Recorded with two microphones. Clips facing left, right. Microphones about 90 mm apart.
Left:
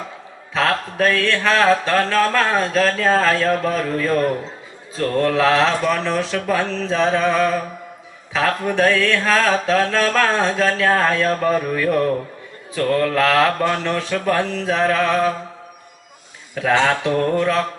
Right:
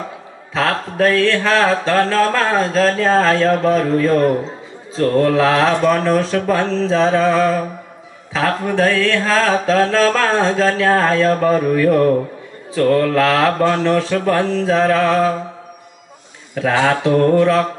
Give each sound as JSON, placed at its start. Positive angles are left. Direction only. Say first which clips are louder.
{"t": 0.6, "sound": "mantra", "louder": "right 2 dB", "side_deg": -20}
{"t": 6.3, "sound": "mantra", "louder": "right 4 dB", "side_deg": -25}
{"t": 16.5, "sound": "speech", "louder": "right 1 dB", "side_deg": -20}
{"t": 16.8, "sound": "mantra", "louder": "right 4 dB", "side_deg": -15}